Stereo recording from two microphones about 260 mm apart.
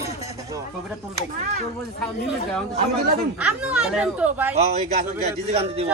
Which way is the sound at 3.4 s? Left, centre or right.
Centre.